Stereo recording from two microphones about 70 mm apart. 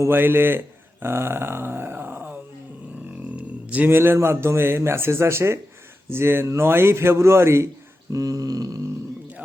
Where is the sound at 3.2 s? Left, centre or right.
Centre.